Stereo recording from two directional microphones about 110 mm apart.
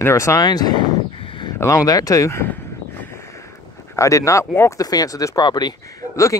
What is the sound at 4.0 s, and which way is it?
Speech, 30° left (ahead or behind).